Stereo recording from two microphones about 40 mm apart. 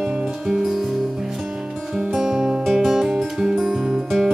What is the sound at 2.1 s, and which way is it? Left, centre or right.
Music, centre.